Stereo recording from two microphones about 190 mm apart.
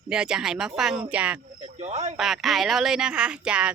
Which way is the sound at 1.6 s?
35° right (ahead or behind).